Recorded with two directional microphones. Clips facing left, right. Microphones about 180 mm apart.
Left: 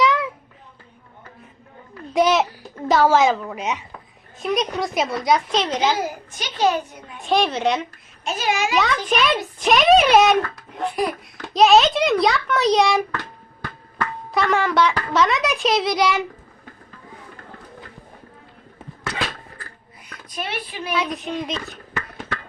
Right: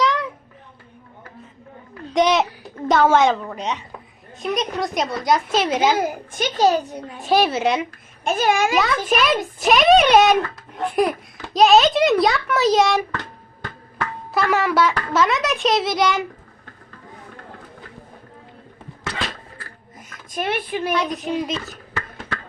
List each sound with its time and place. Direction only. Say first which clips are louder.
0.0 s a sound: left 2 dB; centre (ahead or behind)
2.1 s a woman's voice: even; centre (ahead or behind)
5.8 s a child's voice: right 3 dB; 55° right (ahead or behind); by 7.2 s 35° right (ahead or behind)
7.2 s speech: right 2 dB; 5° right (ahead or behind)
8.2 s a child's voice: right 4 dB; 50° right (ahead or behind)
9.0 s speech: right 1 dB; centre (ahead or behind)
11.5 s speech: even; centre (ahead or behind)
20.0 s speech: right 4 dB; 45° right (ahead or behind)
20.9 s speech: even; centre (ahead or behind)